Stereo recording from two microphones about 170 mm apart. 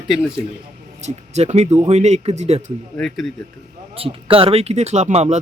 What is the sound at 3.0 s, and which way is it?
Speech, centre (ahead or behind).